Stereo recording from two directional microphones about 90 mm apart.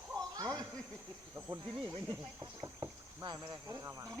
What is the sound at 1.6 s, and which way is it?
Speech, 65° right (ahead or behind).